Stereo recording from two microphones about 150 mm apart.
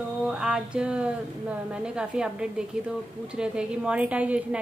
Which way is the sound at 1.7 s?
5° right (ahead or behind).